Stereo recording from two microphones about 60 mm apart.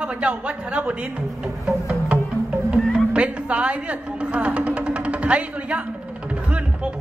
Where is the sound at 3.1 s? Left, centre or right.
Right.